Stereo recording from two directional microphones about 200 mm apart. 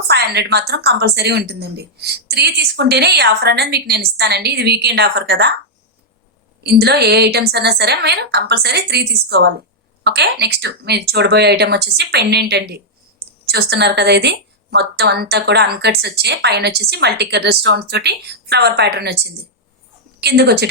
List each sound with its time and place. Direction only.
0.1 s a woman's voice: 55° right (ahead or behind)
6.6 s a woman's voice: 55° right (ahead or behind)
20.2 s a woman's voice: 55° right (ahead or behind)